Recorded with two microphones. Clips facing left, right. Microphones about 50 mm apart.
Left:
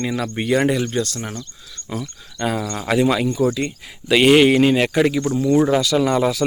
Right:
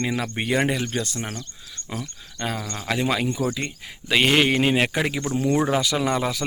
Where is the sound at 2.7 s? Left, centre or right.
Centre.